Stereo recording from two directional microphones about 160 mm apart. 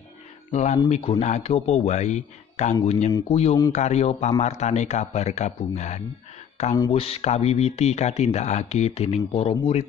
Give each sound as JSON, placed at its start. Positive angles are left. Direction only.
{"t": 0.5, "sound": "a man's voice", "side_deg": 45}